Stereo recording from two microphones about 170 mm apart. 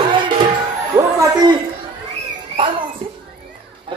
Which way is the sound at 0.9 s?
20° right (ahead or behind).